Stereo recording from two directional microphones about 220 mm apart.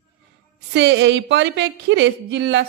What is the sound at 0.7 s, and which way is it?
A woman's voice, 50° right (ahead or behind).